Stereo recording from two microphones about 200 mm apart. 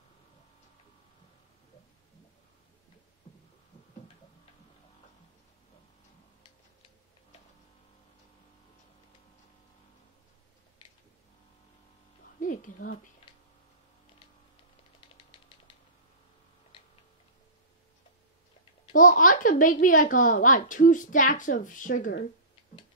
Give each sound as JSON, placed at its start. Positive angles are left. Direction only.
{"t": 12.4, "sound": "speech", "side_deg": 40}
{"t": 18.9, "sound": "a woman's voice", "side_deg": 40}